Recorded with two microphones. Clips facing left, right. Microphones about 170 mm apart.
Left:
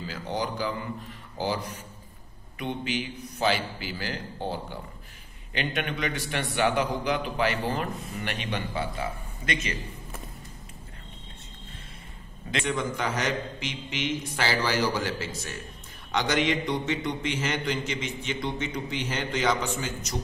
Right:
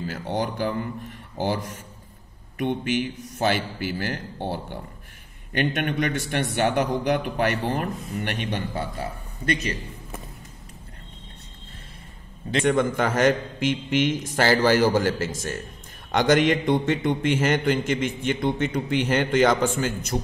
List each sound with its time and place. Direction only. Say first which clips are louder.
0.0 s a man's voice: right 4 dB; 50° right (ahead or behind)
5.5 s a man's voice: right 6 dB; 50° right (ahead or behind)
12.5 s a man's voice: right 8 dB; 50° right (ahead or behind)